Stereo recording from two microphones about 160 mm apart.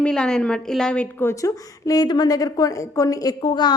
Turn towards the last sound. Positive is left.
turn(degrees=30)  # may be behind; listen again after turning